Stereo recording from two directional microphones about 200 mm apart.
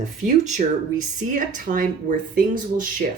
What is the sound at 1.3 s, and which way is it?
Speech, 40° right (ahead or behind).